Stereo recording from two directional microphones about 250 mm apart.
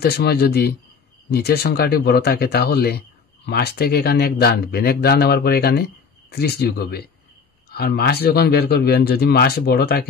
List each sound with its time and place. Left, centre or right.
0.0 s speech: left